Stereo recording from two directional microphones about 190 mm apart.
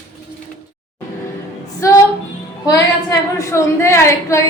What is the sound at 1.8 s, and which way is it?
Music, 15° left (ahead or behind).